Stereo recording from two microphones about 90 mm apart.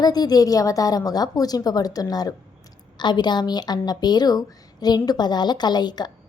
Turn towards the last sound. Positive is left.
turn(degrees=50)  # may be behind; listen again after turning